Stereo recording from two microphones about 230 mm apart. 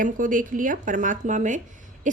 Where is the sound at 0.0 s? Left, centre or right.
Right.